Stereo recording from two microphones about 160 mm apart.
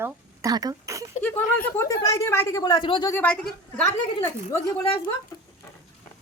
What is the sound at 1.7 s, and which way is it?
A woman's voice, 20° left (ahead or behind).